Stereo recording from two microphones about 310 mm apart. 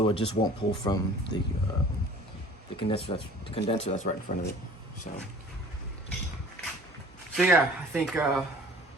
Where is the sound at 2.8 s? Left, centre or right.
Centre.